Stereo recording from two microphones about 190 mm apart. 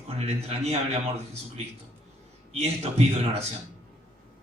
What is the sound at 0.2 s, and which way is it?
A man's voice, 35° right (ahead or behind).